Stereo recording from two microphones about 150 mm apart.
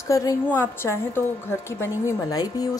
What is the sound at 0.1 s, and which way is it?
A woman's voice, 20° left (ahead or behind).